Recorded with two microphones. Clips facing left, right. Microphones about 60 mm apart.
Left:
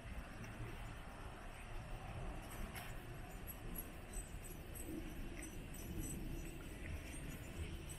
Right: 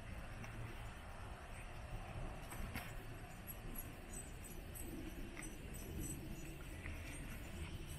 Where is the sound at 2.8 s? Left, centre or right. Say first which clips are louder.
Even; centre.